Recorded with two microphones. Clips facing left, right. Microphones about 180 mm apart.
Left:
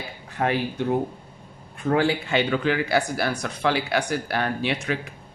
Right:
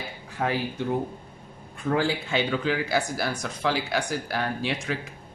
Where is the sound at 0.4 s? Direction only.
55° left (ahead or behind).